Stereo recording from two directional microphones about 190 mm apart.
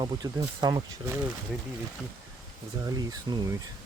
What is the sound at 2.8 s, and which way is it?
Speech, 20° right (ahead or behind).